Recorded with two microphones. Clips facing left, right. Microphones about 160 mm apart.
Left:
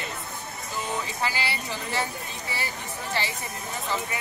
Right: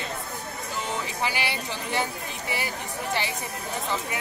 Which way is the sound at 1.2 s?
15° right (ahead or behind).